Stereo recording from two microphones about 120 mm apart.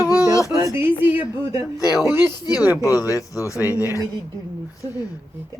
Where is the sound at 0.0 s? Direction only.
30° left (ahead or behind).